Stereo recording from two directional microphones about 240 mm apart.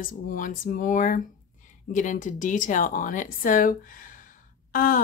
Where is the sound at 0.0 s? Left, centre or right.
Left.